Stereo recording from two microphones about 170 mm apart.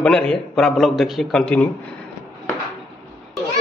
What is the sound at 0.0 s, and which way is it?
Speech, 5° left (ahead or behind).